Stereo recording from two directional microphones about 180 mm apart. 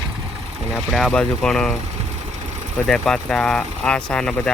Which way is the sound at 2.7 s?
Centre (ahead or behind).